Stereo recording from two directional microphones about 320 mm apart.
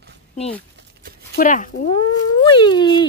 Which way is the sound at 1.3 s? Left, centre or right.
Left.